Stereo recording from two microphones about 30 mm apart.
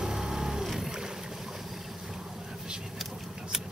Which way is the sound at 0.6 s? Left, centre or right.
Centre.